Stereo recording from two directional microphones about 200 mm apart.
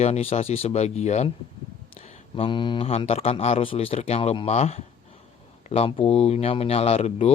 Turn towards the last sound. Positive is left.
turn(degrees=30)  # may be behind; listen again after turning